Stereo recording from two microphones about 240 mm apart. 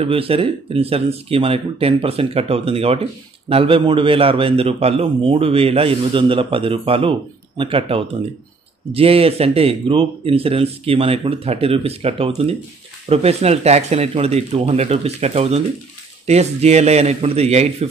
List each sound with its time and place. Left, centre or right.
0.0 s speech: right